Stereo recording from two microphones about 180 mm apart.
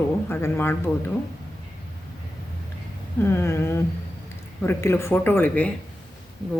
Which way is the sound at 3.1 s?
15° left (ahead or behind).